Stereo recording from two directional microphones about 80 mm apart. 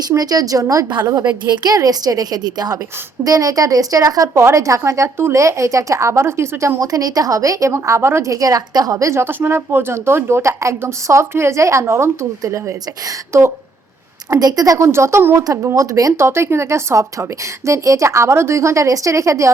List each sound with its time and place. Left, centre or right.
0.2 s speech: right
1.2 s a woman's voice: right
14.3 s speech: right
14.8 s a woman's voice: right
15.4 s speech: right
16.1 s a woman's voice: right